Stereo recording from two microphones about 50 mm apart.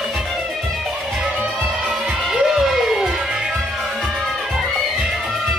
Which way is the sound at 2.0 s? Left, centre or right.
Centre.